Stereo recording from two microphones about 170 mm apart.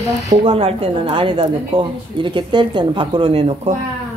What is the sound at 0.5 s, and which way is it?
A woman's voice, 35° right (ahead or behind).